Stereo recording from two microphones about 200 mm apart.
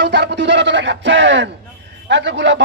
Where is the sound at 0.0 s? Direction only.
60° right (ahead or behind).